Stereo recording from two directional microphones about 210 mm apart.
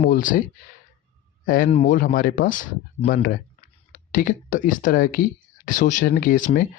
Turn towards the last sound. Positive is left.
turn(degrees=40)  # may be behind; listen again after turning